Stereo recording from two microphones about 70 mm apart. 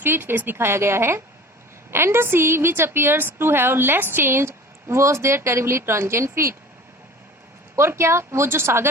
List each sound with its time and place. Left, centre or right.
0.0 s a woman's voice: right
7.8 s a woman's voice: right